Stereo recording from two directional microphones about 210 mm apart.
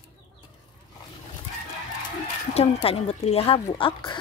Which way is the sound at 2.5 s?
30° left (ahead or behind).